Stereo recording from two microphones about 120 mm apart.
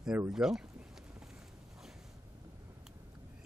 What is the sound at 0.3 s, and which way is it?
Speech, 5° right (ahead or behind).